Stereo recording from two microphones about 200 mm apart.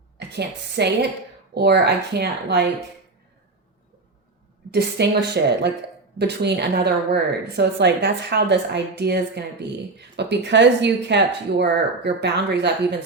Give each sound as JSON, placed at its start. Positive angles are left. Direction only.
{"t": 0.2, "sound": "a woman's voice", "side_deg": -55}
{"t": 4.7, "sound": "a woman's voice", "side_deg": -55}